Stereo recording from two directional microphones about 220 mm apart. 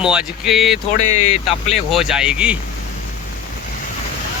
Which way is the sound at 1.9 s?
Centre (ahead or behind).